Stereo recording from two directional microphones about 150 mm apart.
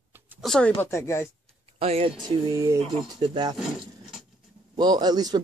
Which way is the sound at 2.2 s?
30° right (ahead or behind).